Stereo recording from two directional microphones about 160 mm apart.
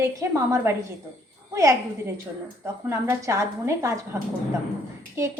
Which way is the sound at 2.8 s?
20° right (ahead or behind).